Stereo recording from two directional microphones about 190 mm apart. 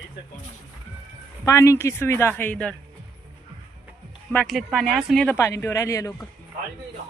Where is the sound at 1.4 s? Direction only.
15° left (ahead or behind).